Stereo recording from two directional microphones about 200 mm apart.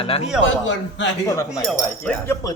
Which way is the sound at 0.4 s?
70° left (ahead or behind).